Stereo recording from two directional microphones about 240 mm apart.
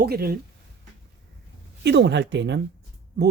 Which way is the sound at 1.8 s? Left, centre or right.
Right.